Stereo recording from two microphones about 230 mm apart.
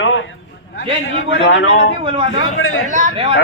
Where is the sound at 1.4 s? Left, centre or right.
Left.